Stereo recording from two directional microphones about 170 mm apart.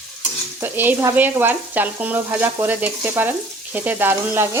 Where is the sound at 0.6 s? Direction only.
10° right (ahead or behind).